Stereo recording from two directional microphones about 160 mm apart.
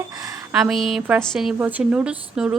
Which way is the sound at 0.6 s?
Centre (ahead or behind).